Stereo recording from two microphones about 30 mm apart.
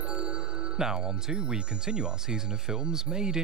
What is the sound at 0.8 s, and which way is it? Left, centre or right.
Speech, right.